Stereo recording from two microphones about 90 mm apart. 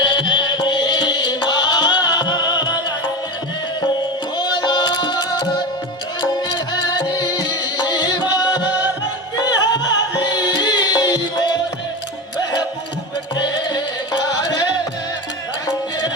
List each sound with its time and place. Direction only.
0.0 s music: 60° left (ahead or behind)
4.4 s music: 55° left (ahead or behind)
13.3 s music: 55° left (ahead or behind)